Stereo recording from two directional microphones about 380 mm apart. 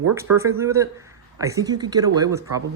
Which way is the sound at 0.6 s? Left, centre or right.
Centre.